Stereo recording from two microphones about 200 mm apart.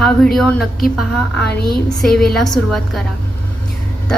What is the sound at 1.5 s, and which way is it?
Speech, 50° left (ahead or behind).